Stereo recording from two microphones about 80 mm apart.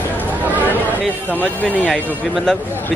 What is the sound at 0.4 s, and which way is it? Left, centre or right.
Chatter, right.